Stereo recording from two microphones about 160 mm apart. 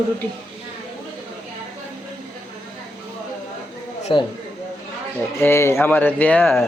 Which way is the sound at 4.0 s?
35° left (ahead or behind).